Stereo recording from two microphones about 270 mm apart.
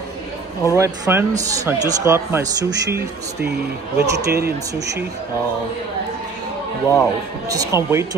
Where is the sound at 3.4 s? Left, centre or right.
Right.